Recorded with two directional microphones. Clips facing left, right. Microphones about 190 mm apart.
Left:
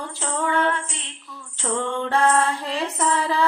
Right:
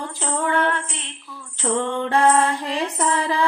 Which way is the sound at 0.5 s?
60° right (ahead or behind).